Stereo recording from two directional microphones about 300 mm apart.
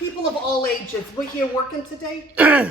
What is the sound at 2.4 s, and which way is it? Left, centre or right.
Speech, centre.